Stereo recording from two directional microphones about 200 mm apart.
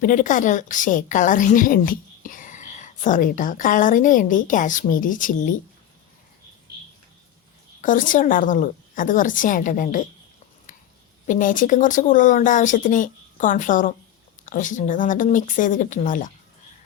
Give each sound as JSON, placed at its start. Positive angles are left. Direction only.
{"t": 0.0, "sound": "a woman's voice", "side_deg": 40}
{"t": 7.8, "sound": "a woman's voice", "side_deg": 40}
{"t": 11.3, "sound": "a woman's voice", "side_deg": 40}